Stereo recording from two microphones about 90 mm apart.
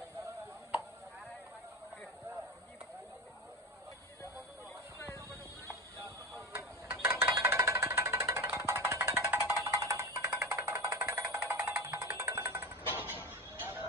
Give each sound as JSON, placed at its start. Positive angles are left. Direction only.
{"t": 6.0, "sound": "music", "side_deg": -30}
{"t": 11.9, "sound": "vehicle", "side_deg": -35}
{"t": 13.3, "sound": "a sound", "side_deg": -25}